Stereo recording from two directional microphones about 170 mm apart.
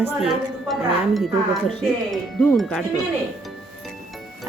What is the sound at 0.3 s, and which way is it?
Speech, centre (ahead or behind).